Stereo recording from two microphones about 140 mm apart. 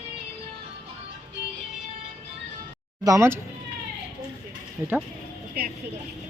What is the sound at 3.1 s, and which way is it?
Speech, 20° right (ahead or behind).